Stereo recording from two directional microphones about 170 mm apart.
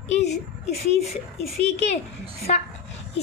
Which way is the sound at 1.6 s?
40° left (ahead or behind).